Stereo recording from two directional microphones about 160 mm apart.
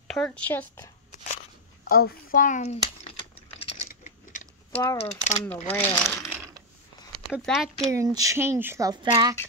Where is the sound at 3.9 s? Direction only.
50° left (ahead or behind).